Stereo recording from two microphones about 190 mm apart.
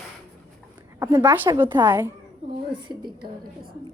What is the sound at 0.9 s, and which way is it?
A woman's voice, 20° right (ahead or behind).